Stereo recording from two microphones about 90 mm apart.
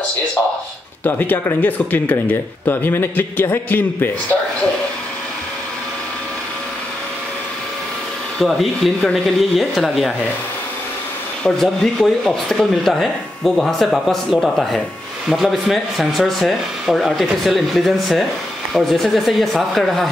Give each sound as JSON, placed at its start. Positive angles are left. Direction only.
{"t": 1.0, "sound": "speech", "side_deg": 20}
{"t": 8.4, "sound": "speech", "side_deg": 0}
{"t": 11.4, "sound": "speech", "side_deg": 5}